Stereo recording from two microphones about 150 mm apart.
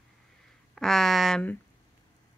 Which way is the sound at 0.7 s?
Centre (ahead or behind).